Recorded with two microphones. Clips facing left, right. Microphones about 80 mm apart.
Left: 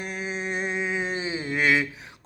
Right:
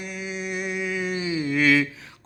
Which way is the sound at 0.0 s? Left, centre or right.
Left.